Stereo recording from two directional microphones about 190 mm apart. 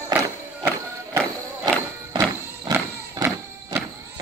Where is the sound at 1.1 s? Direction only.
15° right (ahead or behind).